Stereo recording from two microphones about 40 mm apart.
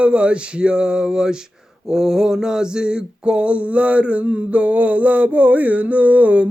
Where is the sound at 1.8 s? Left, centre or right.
Centre.